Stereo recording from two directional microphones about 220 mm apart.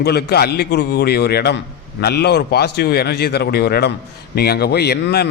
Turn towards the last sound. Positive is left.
turn(degrees=45)  # may be behind; listen again after turning